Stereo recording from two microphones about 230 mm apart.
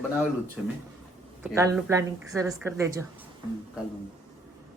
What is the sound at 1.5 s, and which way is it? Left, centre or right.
A woman's voice, centre.